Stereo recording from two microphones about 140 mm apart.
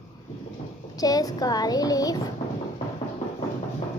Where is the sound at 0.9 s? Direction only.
25° left (ahead or behind).